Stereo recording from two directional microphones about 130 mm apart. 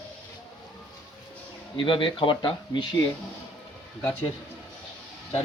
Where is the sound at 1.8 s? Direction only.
40° left (ahead or behind).